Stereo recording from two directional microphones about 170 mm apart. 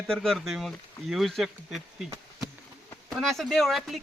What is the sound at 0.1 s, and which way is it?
Speech, centre (ahead or behind).